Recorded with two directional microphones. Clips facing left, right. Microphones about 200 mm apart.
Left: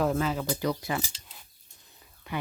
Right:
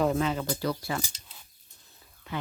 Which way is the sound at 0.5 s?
20° left (ahead or behind).